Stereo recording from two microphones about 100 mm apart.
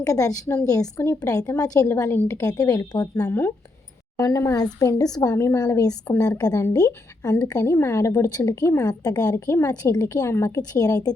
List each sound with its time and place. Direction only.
0.0 s a woman's voice: 35° left (ahead or behind)
1.9 s a woman's voice: 25° left (ahead or behind)
9.3 s a woman's voice: 25° left (ahead or behind)
9.6 s a woman's voice: 35° left (ahead or behind)